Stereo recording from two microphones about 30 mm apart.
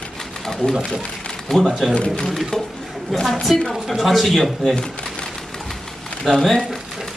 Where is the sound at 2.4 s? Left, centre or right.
Centre.